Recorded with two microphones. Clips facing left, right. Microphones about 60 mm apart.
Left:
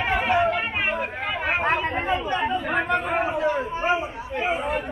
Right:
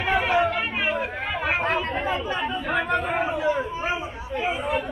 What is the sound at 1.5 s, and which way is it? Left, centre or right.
Chatter, left.